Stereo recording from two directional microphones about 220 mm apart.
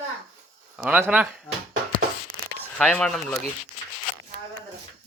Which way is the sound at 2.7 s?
5° left (ahead or behind).